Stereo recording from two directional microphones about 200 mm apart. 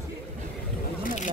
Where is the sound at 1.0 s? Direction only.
35° left (ahead or behind).